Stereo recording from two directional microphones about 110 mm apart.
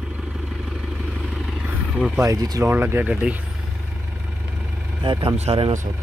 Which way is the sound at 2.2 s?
30° right (ahead or behind).